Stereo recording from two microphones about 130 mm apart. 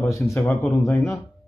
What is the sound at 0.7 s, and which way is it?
Speech, centre (ahead or behind).